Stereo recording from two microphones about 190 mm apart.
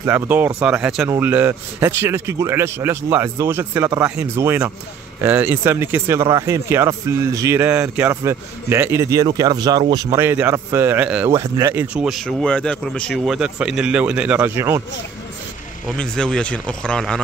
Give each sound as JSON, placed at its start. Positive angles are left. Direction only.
{"t": 0.0, "sound": "speech", "side_deg": -10}
{"t": 16.0, "sound": "speech", "side_deg": 5}